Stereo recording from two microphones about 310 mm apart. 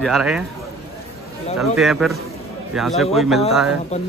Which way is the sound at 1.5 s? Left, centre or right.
Centre.